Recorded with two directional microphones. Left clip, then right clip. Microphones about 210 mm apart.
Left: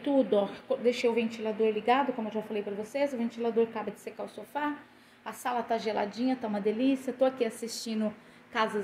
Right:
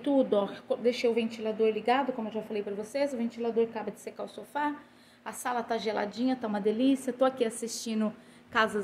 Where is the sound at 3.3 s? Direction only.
10° left (ahead or behind).